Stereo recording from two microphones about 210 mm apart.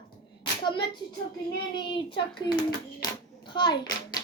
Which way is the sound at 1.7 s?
25° left (ahead or behind).